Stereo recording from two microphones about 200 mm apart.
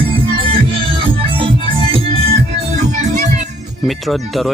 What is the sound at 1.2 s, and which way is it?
Music, 25° right (ahead or behind).